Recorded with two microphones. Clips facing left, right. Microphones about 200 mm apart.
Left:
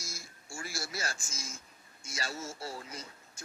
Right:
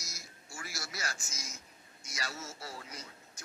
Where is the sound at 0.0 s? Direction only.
30° left (ahead or behind).